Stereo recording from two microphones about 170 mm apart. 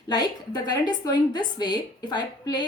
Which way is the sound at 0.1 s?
25° left (ahead or behind).